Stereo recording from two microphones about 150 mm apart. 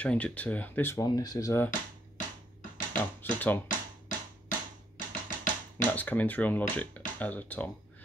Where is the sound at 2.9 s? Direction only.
10° left (ahead or behind).